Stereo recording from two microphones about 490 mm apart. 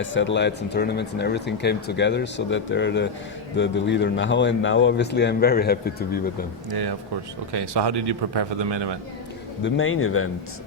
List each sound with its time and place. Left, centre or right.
0.0 s speech: left
6.7 s a man's voice: right
9.6 s speech: left